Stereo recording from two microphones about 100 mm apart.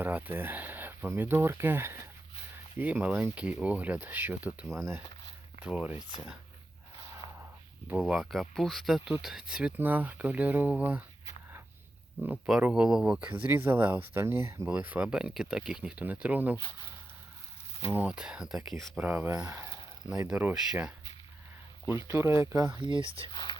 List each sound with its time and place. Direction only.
0.0 s speech: 20° right (ahead or behind)
5.5 s speech: 15° right (ahead or behind)
6.0 s speech: 45° left (ahead or behind)
7.9 s speech: 5° right (ahead or behind)
12.5 s speech: 5° right (ahead or behind)
13.4 s speech: 20° right (ahead or behind)
14.7 s speech: 15° right (ahead or behind)
17.9 s speech: 10° right (ahead or behind)
19.0 s speech: 15° right (ahead or behind)
22.0 s speech: 30° right (ahead or behind)
22.8 s speech: 60° right (ahead or behind)
23.3 s speech: 50° left (ahead or behind)